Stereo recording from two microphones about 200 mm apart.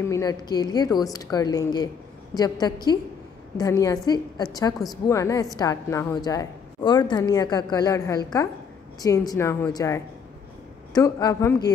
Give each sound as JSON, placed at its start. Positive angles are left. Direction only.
{"t": 0.0, "sound": "a woman's voice", "side_deg": 15}